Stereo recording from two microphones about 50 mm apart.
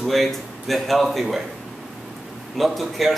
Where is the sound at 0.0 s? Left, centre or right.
Centre.